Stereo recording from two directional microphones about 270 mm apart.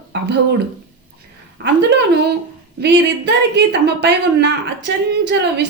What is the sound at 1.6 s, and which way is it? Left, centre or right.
A woman's voice, right.